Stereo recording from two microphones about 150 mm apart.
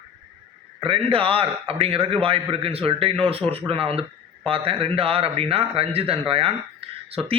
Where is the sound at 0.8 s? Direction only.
40° right (ahead or behind).